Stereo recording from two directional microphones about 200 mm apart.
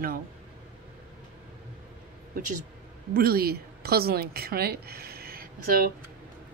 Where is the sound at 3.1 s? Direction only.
50° right (ahead or behind).